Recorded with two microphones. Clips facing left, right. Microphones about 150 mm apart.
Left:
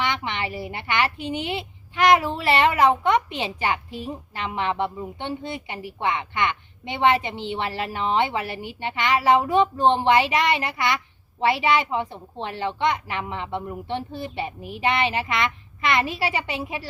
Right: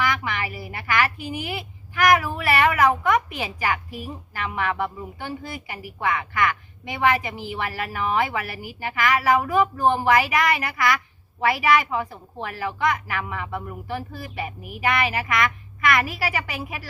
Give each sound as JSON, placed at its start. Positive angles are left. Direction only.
{"t": 0.0, "sound": "a woman's voice", "side_deg": 25}